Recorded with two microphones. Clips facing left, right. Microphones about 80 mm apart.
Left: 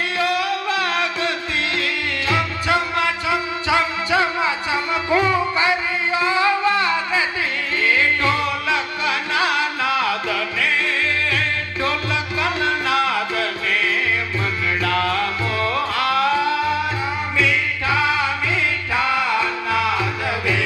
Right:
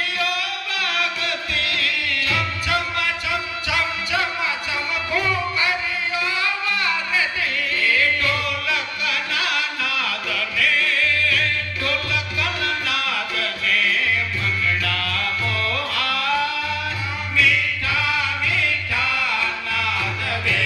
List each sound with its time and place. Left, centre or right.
0.2 s music: left